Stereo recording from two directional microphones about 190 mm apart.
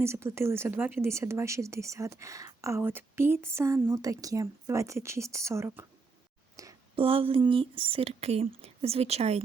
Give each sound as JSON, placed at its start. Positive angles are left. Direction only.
{"t": 0.0, "sound": "speech", "side_deg": -15}
{"t": 6.6, "sound": "a sound", "side_deg": -15}
{"t": 7.0, "sound": "speech", "side_deg": -30}